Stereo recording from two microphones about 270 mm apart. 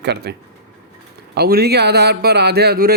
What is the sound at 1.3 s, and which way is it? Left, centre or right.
A man's voice, right.